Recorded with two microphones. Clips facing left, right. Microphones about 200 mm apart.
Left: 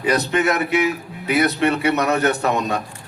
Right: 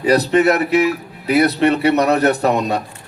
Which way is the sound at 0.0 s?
35° right (ahead or behind).